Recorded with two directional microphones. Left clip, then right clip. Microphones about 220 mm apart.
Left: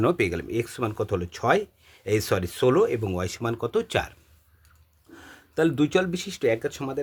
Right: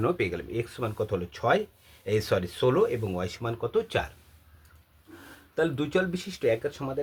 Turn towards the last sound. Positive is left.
turn(degrees=45)  # may be behind; listen again after turning